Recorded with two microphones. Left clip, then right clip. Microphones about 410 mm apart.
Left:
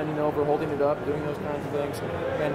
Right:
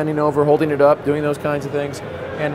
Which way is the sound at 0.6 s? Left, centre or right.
Right.